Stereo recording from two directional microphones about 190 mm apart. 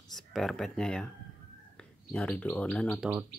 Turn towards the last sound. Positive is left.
turn(degrees=5)  # may be behind; listen again after turning